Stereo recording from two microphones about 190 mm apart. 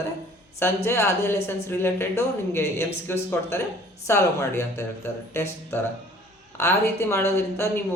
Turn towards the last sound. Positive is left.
turn(degrees=15)  # may be behind; listen again after turning